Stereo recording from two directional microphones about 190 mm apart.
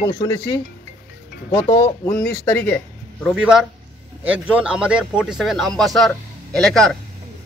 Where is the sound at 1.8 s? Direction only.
20° left (ahead or behind).